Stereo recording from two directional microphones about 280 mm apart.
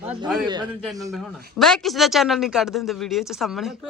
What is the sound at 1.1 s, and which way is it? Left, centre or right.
A man's voice, centre.